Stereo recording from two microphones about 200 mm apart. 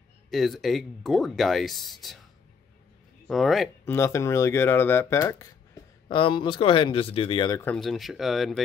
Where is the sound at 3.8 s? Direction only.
15° left (ahead or behind).